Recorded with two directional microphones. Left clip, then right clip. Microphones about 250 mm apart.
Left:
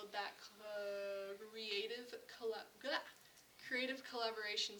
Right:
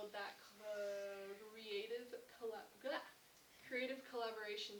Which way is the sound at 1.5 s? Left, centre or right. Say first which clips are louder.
Left 3 dB; left.